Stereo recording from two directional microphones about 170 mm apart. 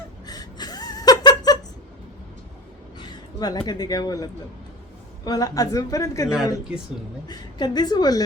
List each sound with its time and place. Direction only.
0.3 s gasp: 25° left (ahead or behind)
3.0 s a sound: 25° left (ahead or behind)
3.7 s a woman's voice: 25° left (ahead or behind)
6.3 s speech: 5° right (ahead or behind)
7.3 s a woman's voice: 25° left (ahead or behind)